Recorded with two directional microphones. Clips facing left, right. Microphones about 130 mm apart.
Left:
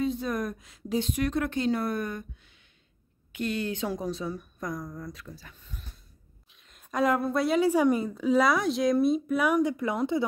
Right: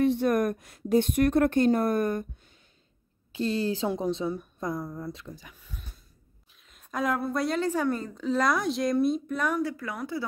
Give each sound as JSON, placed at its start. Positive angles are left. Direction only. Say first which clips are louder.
{"t": 0.0, "sound": "a woman's voice", "louder": "right 6 dB", "side_deg": -70}
{"t": 3.3, "sound": "a woman's voice", "louder": "right 3 dB", "side_deg": -30}